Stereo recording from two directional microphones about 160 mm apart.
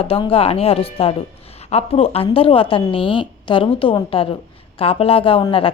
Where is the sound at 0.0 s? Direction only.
35° left (ahead or behind).